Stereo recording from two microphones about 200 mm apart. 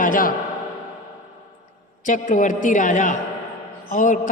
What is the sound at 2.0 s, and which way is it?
A man's voice, 40° left (ahead or behind).